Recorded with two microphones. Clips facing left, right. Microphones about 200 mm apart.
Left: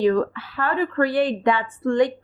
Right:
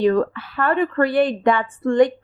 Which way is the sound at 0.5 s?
55° right (ahead or behind).